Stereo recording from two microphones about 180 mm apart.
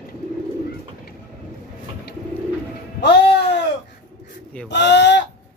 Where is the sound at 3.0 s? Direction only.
70° left (ahead or behind).